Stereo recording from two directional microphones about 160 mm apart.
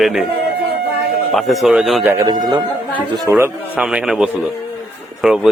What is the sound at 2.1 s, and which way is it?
A man's voice, 25° right (ahead or behind).